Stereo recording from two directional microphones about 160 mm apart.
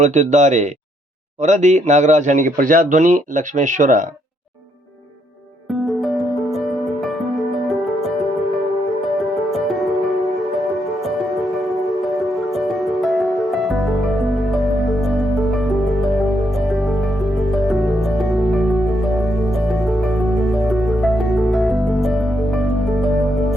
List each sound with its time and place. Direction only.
0.0 s a man's voice: 50° right (ahead or behind)
5.8 s music: centre (ahead or behind)